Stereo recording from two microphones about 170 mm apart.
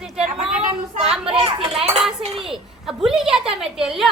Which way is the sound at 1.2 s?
35° right (ahead or behind).